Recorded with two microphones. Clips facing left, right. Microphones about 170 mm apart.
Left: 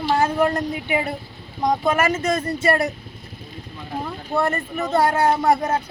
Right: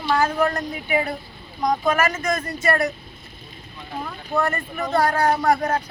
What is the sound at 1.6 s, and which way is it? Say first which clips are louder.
Speech: left 1 dB; 30° left (ahead or behind).